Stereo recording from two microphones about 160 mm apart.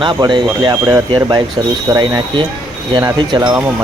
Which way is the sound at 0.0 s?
30° right (ahead or behind).